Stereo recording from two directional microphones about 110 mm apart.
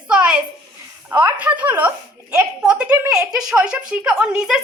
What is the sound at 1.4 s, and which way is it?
A woman's voice, 15° right (ahead or behind).